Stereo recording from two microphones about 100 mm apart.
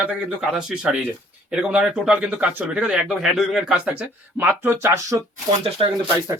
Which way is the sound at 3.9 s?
15° right (ahead or behind).